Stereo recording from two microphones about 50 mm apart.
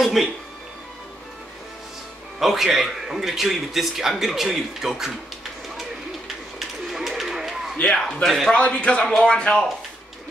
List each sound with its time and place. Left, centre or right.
0.0 s speech: centre
2.4 s a man's voice: centre
6.9 s bird: centre
7.8 s speech: centre
8.5 s speech: left